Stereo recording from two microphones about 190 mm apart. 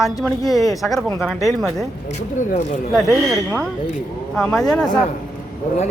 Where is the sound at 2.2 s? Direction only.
35° left (ahead or behind).